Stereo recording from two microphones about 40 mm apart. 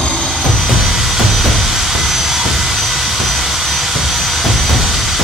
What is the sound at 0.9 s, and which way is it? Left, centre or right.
Vehicle, centre.